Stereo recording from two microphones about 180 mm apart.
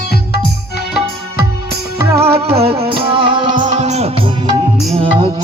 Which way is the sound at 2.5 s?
35° right (ahead or behind).